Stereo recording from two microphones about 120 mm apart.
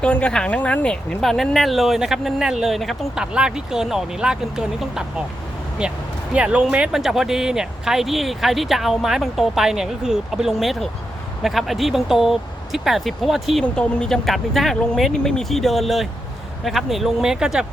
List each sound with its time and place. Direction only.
0.0 s speech: 10° left (ahead or behind); by 17.7 s 5° right (ahead or behind)